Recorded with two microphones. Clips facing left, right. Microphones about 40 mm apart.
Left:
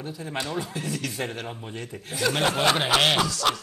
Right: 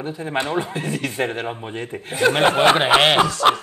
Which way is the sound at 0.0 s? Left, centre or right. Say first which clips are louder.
Right 7 dB; right.